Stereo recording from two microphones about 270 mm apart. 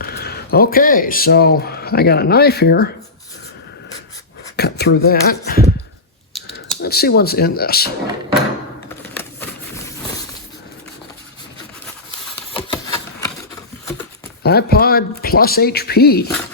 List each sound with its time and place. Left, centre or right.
0.0 s speech: left
4.5 s speech: left
6.3 s typing: centre
6.8 s speech: left
9.1 s a sound: centre
12.5 s a sound: centre
14.4 s speech: left